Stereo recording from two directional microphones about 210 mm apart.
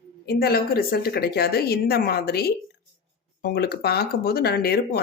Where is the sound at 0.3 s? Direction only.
50° left (ahead or behind).